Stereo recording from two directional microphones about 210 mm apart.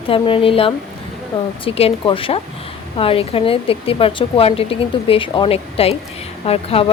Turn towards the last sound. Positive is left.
turn(degrees=25)  # may be behind; listen again after turning